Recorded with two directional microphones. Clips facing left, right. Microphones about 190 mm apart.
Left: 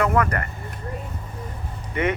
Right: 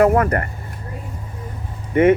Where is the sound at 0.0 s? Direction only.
45° right (ahead or behind).